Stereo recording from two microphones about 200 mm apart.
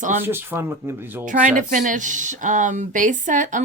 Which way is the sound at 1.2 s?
40° right (ahead or behind).